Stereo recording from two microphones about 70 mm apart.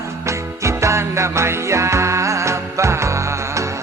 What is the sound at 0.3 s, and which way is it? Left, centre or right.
Music, right.